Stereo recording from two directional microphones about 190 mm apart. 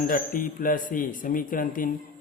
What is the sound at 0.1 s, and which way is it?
Speech, 45° left (ahead or behind).